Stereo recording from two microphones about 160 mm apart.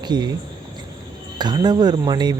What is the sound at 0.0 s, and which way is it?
Speech, 25° right (ahead or behind).